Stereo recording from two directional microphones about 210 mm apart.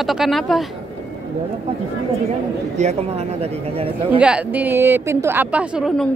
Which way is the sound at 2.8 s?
30° right (ahead or behind).